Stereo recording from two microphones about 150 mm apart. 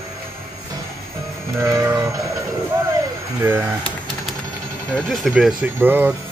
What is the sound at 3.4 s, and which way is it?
Speech, 15° right (ahead or behind).